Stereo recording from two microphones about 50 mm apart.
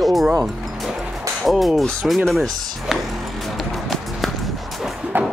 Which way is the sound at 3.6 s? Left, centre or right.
Centre.